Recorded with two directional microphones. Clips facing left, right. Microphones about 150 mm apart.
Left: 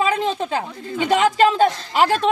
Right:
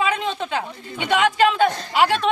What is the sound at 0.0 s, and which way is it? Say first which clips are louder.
Speech: left 3 dB; 35° left (ahead or behind).